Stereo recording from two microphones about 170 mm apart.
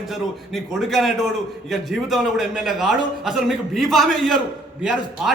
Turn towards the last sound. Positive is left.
turn(degrees=-5)  # may be behind; listen again after turning